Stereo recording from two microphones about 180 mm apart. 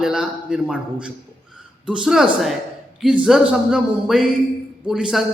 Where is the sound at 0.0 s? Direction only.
5° right (ahead or behind).